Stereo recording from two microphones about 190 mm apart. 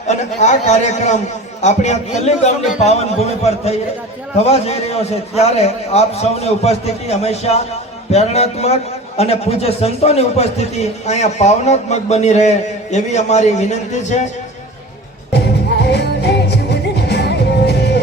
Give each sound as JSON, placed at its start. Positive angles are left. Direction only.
{"t": 0.4, "sound": "a man's voice", "side_deg": 40}
{"t": 15.3, "sound": "music", "side_deg": 60}